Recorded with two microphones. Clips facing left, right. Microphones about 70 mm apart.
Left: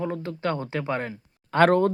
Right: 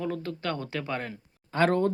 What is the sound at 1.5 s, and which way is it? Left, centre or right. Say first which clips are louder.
Speech: left 5 dB; left.